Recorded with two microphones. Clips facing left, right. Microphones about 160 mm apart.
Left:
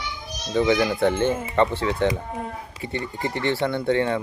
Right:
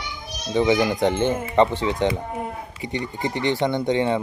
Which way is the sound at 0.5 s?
15° right (ahead or behind).